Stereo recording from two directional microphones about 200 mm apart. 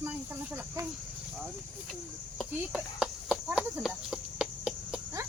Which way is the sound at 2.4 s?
Centre (ahead or behind).